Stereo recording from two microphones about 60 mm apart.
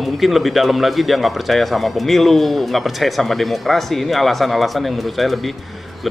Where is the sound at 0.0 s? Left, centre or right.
Centre.